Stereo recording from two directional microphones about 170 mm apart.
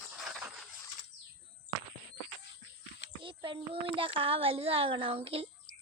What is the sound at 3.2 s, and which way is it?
A child's voice, 30° right (ahead or behind).